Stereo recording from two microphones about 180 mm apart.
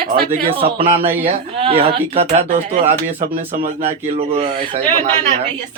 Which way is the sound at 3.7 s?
35° right (ahead or behind).